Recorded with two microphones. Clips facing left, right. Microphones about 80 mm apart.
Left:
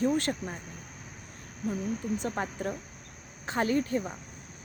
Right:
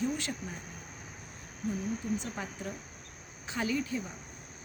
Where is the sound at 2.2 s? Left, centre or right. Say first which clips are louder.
Left 7 dB; left.